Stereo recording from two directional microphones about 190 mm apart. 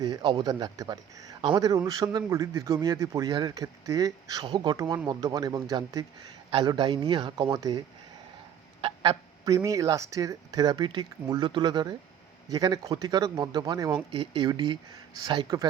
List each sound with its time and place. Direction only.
0.0 s a man's voice: 20° right (ahead or behind)
8.8 s a man's voice: 20° right (ahead or behind)